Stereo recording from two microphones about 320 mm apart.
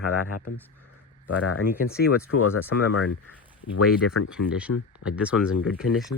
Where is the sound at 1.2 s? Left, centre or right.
Left.